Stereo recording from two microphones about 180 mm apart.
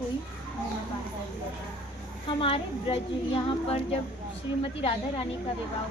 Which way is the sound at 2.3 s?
30° left (ahead or behind).